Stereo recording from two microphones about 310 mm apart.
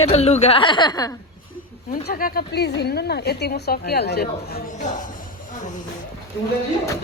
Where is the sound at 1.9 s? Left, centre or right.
Left.